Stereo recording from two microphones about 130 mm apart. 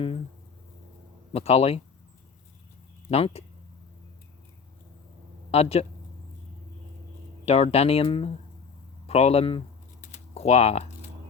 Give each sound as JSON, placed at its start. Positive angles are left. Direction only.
{"t": 1.3, "sound": "speech", "side_deg": 50}
{"t": 3.1, "sound": "speech", "side_deg": 50}
{"t": 5.5, "sound": "speech", "side_deg": 50}
{"t": 7.4, "sound": "speech", "side_deg": 50}
{"t": 10.1, "sound": "typing", "side_deg": 50}